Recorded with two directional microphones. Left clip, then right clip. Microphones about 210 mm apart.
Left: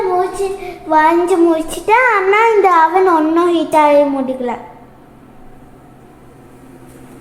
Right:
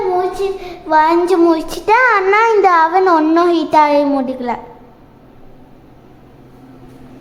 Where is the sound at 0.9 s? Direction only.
5° right (ahead or behind).